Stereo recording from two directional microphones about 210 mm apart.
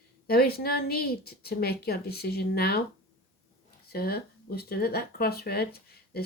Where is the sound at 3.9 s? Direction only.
50° left (ahead or behind).